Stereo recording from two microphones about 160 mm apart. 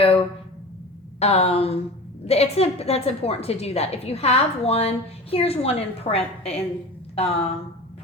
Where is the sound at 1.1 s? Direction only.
40° left (ahead or behind).